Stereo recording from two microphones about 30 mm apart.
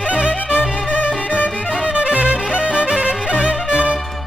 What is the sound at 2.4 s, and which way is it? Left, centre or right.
Music, right.